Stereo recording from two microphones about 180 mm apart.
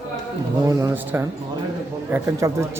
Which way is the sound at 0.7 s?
15° right (ahead or behind).